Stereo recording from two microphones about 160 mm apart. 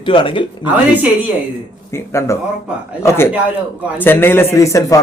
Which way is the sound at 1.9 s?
20° left (ahead or behind).